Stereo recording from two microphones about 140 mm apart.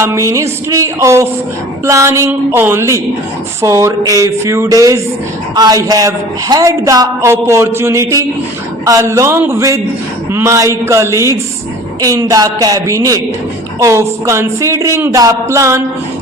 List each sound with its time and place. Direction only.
0.0 s a woman's voice: 20° right (ahead or behind)